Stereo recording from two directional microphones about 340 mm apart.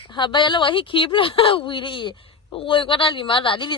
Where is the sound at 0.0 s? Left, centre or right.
Centre.